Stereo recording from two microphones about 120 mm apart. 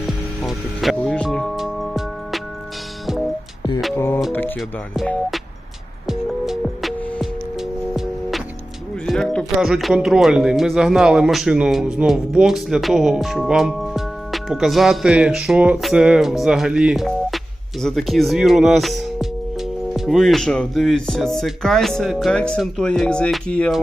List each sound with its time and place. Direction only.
0.4 s music: centre (ahead or behind)
3.9 s music: 20° left (ahead or behind)
6.1 s music: centre (ahead or behind)
9.0 s speech: 5° left (ahead or behind)